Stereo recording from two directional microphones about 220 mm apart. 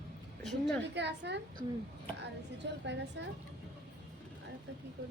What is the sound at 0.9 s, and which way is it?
A woman's voice, 50° right (ahead or behind).